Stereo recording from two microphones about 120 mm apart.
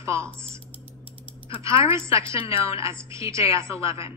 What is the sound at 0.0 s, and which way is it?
Speech, 25° right (ahead or behind).